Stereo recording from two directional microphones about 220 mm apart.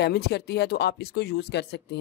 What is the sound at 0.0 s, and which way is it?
Speech, 50° left (ahead or behind).